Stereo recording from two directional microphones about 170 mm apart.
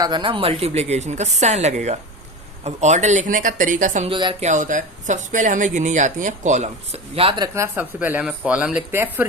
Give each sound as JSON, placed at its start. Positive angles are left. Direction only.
{"t": 0.0, "sound": "speech", "side_deg": -25}
{"t": 4.1, "sound": "speech", "side_deg": -30}
{"t": 4.4, "sound": "speech", "side_deg": -45}